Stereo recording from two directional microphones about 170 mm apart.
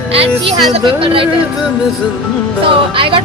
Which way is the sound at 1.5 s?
Centre (ahead or behind).